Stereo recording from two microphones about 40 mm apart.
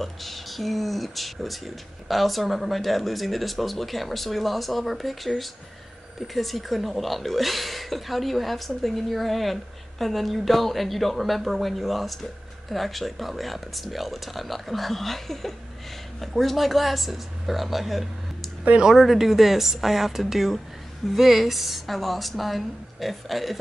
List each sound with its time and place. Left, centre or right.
0.0 s speech: centre